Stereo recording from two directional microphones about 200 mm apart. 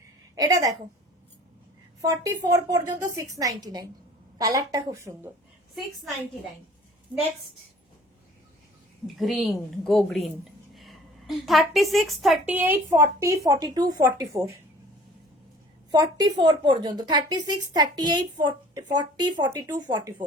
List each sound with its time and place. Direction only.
0.3 s a woman's voice: 15° right (ahead or behind)
2.0 s a woman's voice: 15° right (ahead or behind)
9.1 s a woman's voice: centre (ahead or behind); by 14.5 s 15° right (ahead or behind)
15.9 s a woman's voice: 20° right (ahead or behind)